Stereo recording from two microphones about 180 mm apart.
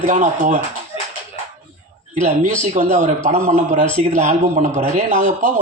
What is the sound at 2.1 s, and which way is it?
A man's voice, 40° right (ahead or behind).